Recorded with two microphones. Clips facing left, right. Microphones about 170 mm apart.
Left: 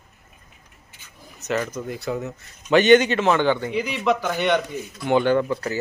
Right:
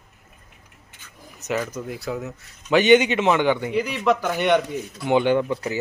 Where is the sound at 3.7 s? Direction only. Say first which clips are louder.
Right 1 dB; centre (ahead or behind).